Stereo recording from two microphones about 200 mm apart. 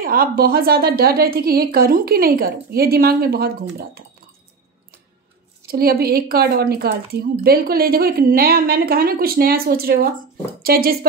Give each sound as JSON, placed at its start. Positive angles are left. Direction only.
{"t": 0.0, "sound": "speech", "side_deg": -45}
{"t": 5.7, "sound": "speech", "side_deg": -50}